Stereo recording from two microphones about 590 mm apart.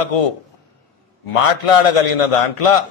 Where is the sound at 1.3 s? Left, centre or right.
Left.